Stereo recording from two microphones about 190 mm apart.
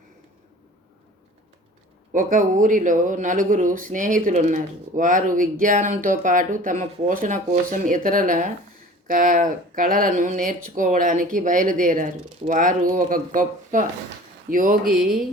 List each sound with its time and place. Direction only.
2.1 s speech: 45° right (ahead or behind)
14.8 s mantra: centre (ahead or behind)